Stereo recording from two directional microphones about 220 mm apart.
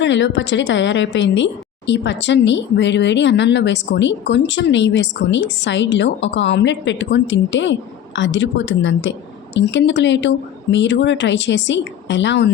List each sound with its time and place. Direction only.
0.0 s speech: 55° left (ahead or behind)